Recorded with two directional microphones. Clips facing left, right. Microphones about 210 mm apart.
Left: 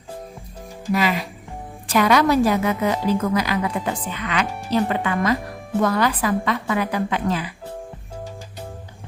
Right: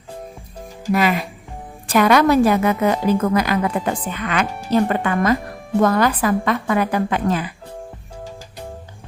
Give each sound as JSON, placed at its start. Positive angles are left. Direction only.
{"t": 0.9, "sound": "a woman's voice", "side_deg": -55}